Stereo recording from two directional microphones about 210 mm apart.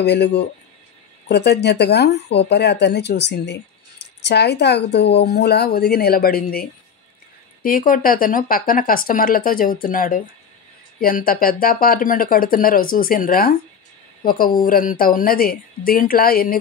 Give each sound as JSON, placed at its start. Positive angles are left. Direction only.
{"t": 0.0, "sound": "speech", "side_deg": 55}